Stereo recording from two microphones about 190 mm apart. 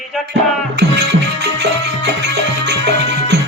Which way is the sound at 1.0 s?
60° right (ahead or behind).